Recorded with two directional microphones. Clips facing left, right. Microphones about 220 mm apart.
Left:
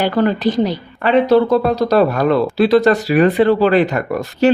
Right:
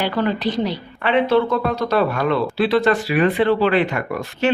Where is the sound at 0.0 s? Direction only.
45° left (ahead or behind).